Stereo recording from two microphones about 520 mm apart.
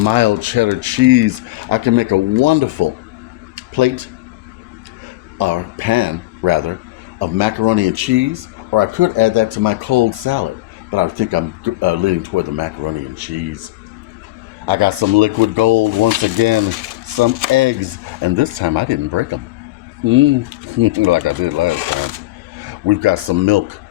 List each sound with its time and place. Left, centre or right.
0.0 s speech: right
3.5 s a sound: right
5.4 s speech: right
14.7 s speech: right